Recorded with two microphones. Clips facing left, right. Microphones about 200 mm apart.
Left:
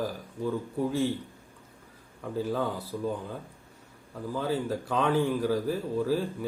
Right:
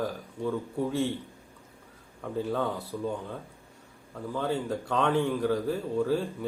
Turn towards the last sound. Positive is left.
turn(degrees=5)  # may be behind; listen again after turning